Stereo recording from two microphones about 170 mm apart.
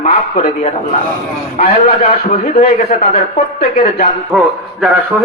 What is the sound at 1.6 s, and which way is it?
Speech, 65° left (ahead or behind).